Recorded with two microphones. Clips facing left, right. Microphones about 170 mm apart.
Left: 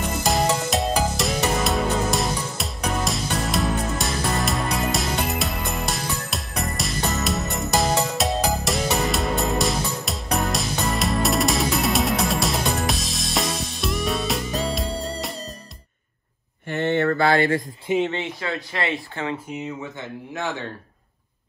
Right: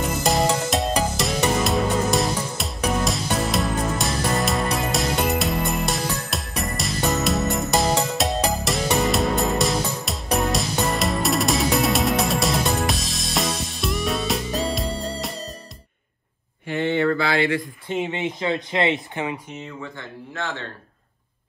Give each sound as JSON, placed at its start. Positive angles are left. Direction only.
{"t": 0.2, "sound": "music", "side_deg": 0}
{"t": 16.6, "sound": "mantra", "side_deg": 50}
{"t": 18.0, "sound": "speech", "side_deg": -15}
{"t": 19.5, "sound": "speech", "side_deg": 15}